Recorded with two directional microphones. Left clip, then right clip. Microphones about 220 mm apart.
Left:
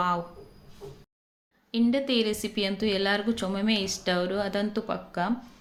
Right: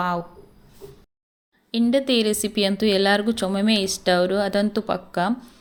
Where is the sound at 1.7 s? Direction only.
35° right (ahead or behind).